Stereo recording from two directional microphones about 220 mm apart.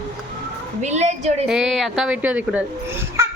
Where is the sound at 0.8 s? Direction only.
30° right (ahead or behind).